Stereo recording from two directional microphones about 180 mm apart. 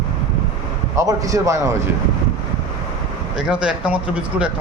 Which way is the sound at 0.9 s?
20° right (ahead or behind).